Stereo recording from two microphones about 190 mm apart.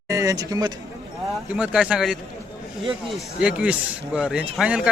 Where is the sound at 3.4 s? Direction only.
5° right (ahead or behind).